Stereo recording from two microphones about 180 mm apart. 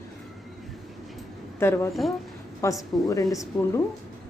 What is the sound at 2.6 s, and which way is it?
Speech, 15° left (ahead or behind).